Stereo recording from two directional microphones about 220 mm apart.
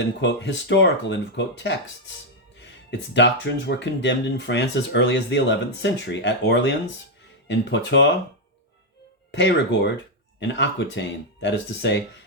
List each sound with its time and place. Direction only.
0.2 s speech: 50° left (ahead or behind)
9.3 s speech: 50° left (ahead or behind)